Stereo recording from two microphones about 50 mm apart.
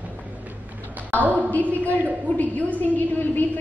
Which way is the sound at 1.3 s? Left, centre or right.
Left.